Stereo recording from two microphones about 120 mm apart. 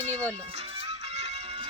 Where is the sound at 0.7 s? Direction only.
60° right (ahead or behind).